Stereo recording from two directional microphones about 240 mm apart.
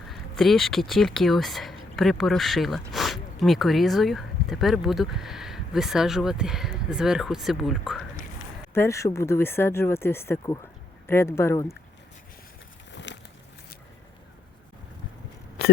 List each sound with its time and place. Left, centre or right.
0.1 s speech: centre
8.7 s speech: centre
12.9 s a sound: left